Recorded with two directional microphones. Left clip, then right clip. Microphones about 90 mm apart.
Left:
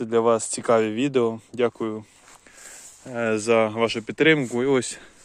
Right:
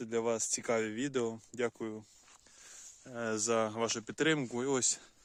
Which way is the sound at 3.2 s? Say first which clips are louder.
Left 12 dB; 20° right (ahead or behind).